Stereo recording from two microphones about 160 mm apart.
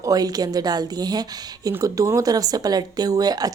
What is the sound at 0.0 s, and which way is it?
A woman's voice, 25° right (ahead or behind).